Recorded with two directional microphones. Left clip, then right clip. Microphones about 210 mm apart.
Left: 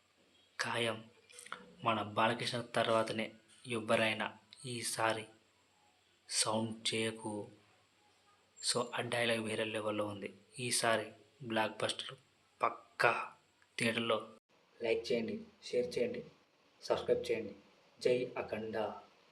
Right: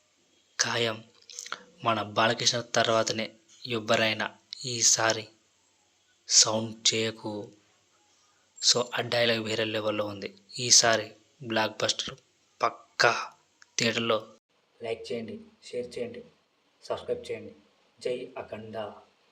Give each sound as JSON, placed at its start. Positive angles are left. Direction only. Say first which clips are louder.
{"t": 0.5, "sound": "speech", "louder": "right 8 dB", "side_deg": -20}
{"t": 6.2, "sound": "a man's voice", "louder": "right 12 dB", "side_deg": -20}
{"t": 8.5, "sound": "a man's voice", "louder": "right 11 dB", "side_deg": -20}
{"t": 14.8, "sound": "speech", "louder": "right 1 dB", "side_deg": 0}